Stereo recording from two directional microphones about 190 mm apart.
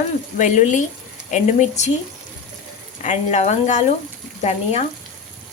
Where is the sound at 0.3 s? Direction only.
40° left (ahead or behind).